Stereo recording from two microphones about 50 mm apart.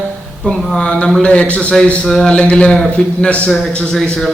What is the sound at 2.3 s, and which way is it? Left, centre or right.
A man's voice, left.